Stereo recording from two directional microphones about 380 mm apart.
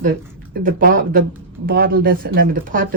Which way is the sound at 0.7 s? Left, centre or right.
Right.